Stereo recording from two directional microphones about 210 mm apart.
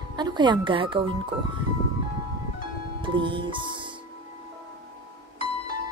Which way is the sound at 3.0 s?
25° right (ahead or behind).